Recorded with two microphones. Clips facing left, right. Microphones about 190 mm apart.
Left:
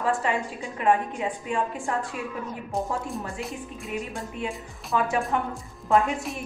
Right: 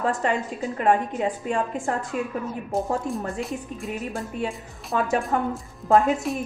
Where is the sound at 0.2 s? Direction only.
40° right (ahead or behind).